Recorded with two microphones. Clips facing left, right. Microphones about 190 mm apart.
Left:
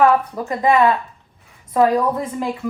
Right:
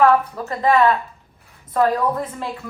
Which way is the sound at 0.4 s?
15° left (ahead or behind).